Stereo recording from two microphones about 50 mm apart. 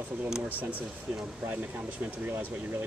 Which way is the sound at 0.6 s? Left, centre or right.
Right.